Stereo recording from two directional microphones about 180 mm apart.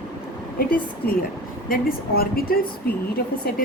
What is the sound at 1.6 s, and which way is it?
Speech, 55° left (ahead or behind).